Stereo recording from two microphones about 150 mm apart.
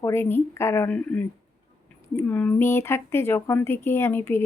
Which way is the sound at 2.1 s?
10° left (ahead or behind).